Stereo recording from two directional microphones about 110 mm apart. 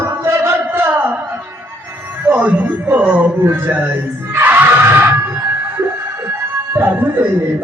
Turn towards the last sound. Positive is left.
turn(degrees=-20)  # may be behind; listen again after turning